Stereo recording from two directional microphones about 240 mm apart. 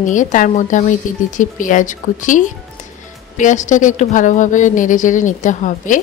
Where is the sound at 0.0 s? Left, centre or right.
Left.